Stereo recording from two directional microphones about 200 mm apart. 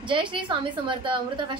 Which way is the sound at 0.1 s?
25° right (ahead or behind).